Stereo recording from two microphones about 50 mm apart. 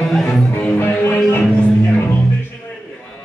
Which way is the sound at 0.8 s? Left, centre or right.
Left.